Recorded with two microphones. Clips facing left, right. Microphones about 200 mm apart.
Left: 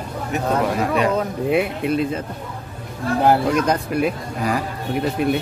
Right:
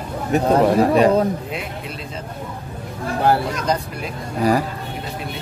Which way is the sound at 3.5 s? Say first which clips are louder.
Left 4 dB; 60° left (ahead or behind).